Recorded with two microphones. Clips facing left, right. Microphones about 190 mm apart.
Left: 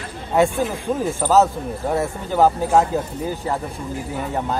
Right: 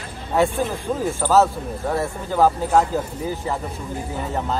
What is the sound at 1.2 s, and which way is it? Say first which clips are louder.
Speech: left 1 dB; 15° left (ahead or behind).